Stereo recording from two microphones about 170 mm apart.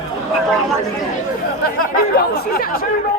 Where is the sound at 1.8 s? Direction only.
60° left (ahead or behind).